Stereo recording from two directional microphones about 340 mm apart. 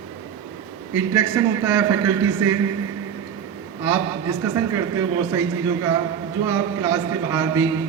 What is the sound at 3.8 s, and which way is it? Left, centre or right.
A man's voice, centre.